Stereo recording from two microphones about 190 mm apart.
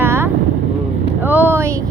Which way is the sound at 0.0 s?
10° right (ahead or behind).